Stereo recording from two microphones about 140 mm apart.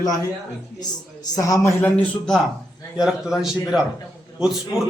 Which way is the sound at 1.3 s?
25° left (ahead or behind).